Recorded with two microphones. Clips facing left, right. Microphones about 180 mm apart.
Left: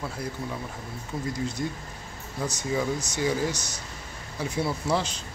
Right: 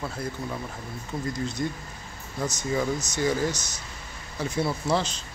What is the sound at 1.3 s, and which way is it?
Speech, 10° left (ahead or behind).